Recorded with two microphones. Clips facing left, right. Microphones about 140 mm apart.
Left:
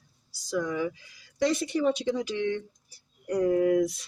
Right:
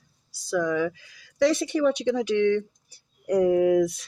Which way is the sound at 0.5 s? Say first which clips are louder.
Right 4 dB; 90° right.